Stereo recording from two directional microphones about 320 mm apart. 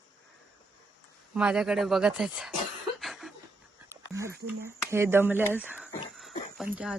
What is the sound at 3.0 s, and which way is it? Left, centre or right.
Chuckle, centre.